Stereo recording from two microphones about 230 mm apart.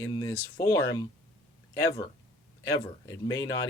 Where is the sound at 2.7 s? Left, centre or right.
Centre.